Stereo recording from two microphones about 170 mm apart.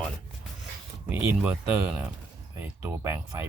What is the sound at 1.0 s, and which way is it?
Speech, 10° right (ahead or behind).